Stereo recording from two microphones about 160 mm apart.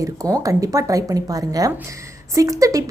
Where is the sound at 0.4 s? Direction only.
20° right (ahead or behind).